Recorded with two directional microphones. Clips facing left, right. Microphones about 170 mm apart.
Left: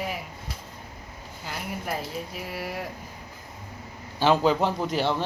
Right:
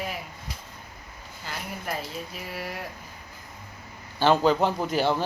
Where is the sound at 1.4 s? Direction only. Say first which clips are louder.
Left 2 dB; 10° left (ahead or behind).